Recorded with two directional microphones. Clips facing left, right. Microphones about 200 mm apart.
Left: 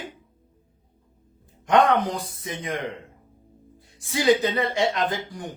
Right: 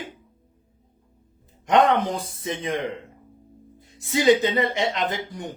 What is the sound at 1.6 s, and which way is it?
A man's voice, 20° right (ahead or behind).